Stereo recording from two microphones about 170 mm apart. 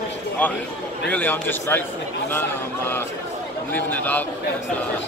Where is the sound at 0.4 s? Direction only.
10° left (ahead or behind).